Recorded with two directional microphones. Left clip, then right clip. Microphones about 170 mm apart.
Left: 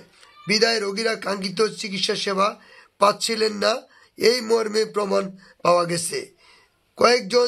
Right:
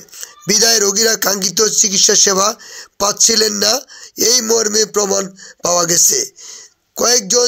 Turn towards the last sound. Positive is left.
turn(degrees=-30)  # may be behind; listen again after turning